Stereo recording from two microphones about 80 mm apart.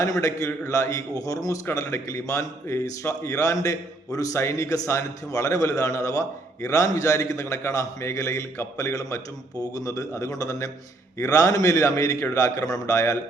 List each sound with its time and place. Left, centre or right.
0.0 s a man's voice: left